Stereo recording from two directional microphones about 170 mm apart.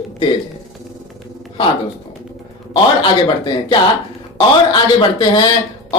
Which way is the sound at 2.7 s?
30° left (ahead or behind).